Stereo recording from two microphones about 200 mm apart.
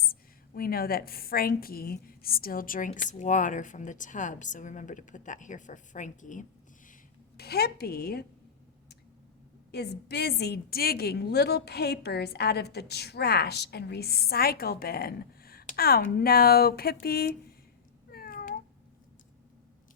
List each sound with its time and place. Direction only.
0.0 s a woman's voice: 45° left (ahead or behind)
7.3 s a woman's voice: 50° left (ahead or behind)
9.7 s a woman's voice: 55° left (ahead or behind)
18.1 s meow: 45° left (ahead or behind)